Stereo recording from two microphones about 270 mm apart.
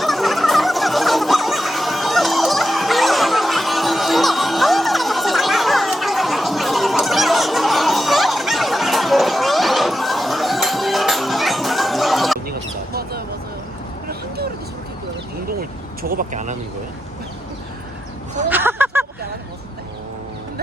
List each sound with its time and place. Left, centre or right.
0.0 s fowl: centre
12.5 s vehicle: right
16.0 s vehicle: right
18.4 s a sound: centre